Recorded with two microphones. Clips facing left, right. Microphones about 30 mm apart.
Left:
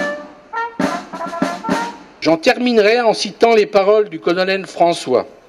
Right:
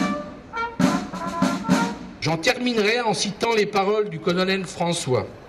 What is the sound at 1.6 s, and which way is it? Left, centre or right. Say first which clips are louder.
Music: left 2 dB; left.